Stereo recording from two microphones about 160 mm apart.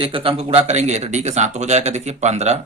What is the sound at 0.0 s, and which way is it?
Speech, 35° right (ahead or behind).